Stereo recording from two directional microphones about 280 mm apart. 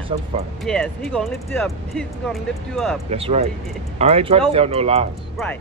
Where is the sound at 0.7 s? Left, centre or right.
Centre.